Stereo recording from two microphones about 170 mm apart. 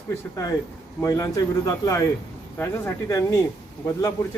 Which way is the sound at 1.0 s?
20° left (ahead or behind).